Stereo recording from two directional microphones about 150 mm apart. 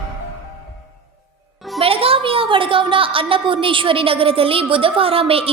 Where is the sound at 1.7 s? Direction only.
40° right (ahead or behind).